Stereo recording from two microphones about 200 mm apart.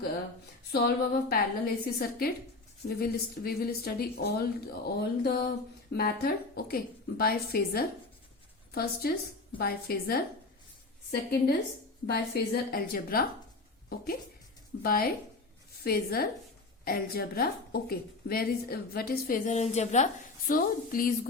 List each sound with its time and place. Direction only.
0.7 s a woman's voice: 50° left (ahead or behind)
14.8 s a woman's voice: 45° left (ahead or behind)
20.5 s a woman's voice: 45° left (ahead or behind)